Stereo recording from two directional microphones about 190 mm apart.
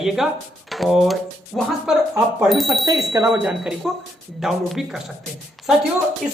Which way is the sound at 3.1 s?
10° right (ahead or behind).